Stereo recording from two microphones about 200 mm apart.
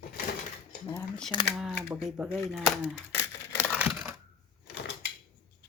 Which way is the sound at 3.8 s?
5° right (ahead or behind).